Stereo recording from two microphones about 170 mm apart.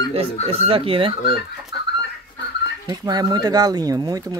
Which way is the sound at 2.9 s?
25° right (ahead or behind).